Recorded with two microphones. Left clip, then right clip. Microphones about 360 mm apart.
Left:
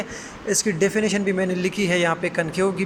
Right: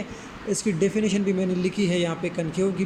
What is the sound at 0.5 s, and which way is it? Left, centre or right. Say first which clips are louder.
Speech: left 4 dB; left.